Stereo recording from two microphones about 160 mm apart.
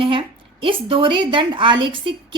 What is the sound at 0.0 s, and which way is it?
A woman's voice, 35° right (ahead or behind).